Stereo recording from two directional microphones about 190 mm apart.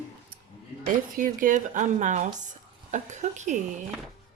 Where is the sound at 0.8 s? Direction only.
45° right (ahead or behind).